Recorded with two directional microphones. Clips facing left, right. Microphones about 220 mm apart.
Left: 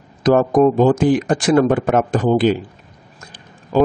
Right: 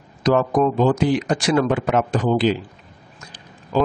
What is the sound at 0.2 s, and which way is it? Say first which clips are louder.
Speech: left 5 dB; 50° left (ahead or behind).